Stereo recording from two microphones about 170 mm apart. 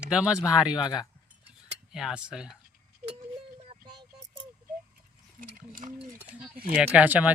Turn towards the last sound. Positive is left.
turn(degrees=-10)  # may be behind; listen again after turning